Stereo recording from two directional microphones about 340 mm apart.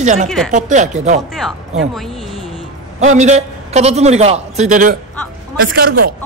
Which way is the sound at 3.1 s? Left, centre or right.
Centre.